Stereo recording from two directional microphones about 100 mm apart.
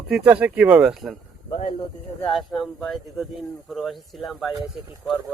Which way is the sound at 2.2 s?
Centre (ahead or behind).